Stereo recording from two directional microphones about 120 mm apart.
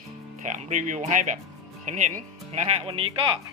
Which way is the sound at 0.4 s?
90° right.